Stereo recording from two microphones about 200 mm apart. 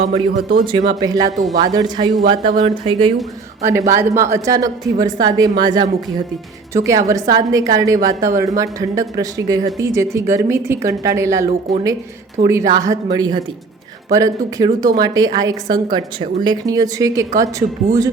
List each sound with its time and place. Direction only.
0.0 s a man's voice: 45° right (ahead or behind)
0.9 s a woman's voice: 20° right (ahead or behind)
3.7 s a woman's voice: 15° right (ahead or behind)